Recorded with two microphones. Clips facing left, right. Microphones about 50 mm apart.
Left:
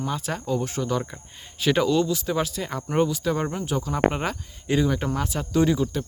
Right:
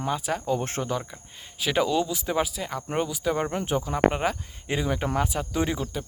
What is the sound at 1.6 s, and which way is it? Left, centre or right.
Speech, centre.